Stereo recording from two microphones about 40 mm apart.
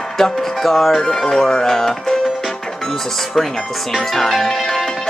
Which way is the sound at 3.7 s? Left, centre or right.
Centre.